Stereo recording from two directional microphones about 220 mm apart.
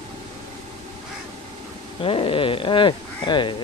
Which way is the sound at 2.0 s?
25° left (ahead or behind).